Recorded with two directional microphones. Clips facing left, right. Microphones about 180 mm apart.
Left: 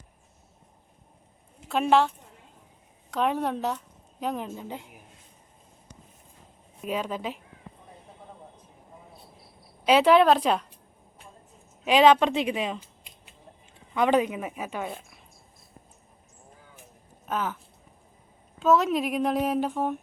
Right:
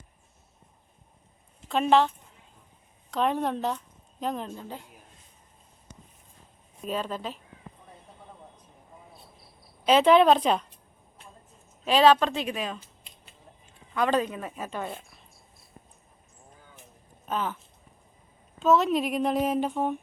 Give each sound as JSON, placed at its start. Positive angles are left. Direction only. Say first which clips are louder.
{"t": 1.6, "sound": "speech", "louder": "even", "side_deg": 5}
{"t": 6.8, "sound": "speech", "louder": "left 1 dB", "side_deg": 10}
{"t": 9.8, "sound": "a woman's voice", "louder": "even", "side_deg": 10}
{"t": 11.9, "sound": "speech", "louder": "left 1 dB", "side_deg": 15}
{"t": 17.2, "sound": "speech", "louder": "even", "side_deg": 5}
{"t": 18.6, "sound": "a woman's voice", "louder": "even", "side_deg": 0}